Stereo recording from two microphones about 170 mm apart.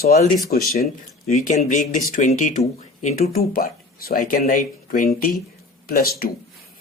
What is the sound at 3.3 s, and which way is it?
Speech, 60° left (ahead or behind).